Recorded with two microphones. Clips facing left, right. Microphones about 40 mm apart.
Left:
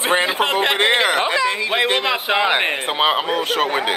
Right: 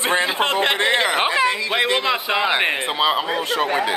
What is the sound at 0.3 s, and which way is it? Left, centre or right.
Speech, centre.